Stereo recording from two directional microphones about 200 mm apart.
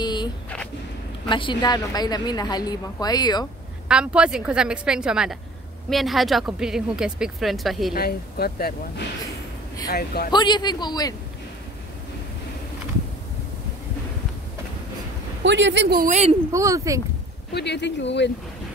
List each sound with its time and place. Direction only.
0.0 s a sound: 20° left (ahead or behind)
1.2 s a woman's voice: 25° left (ahead or behind)
3.9 s speech: 5° right (ahead or behind)
7.9 s speech: 50° left (ahead or behind)
10.3 s a woman's voice: 20° left (ahead or behind)
15.4 s a man's voice: 65° right (ahead or behind)
16.1 s speech: 35° right (ahead or behind)
16.5 s speech: 15° right (ahead or behind)
17.6 s speech: 60° left (ahead or behind)